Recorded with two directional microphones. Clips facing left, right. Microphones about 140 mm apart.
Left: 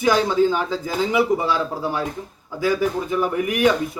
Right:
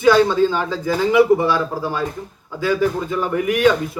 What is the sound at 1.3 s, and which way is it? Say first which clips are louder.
Speech: right 5 dB; 5° right (ahead or behind).